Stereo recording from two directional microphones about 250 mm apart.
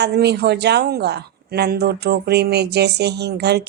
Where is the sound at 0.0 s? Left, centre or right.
Right.